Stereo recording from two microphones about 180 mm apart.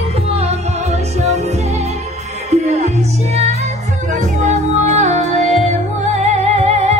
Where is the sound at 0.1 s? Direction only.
35° right (ahead or behind).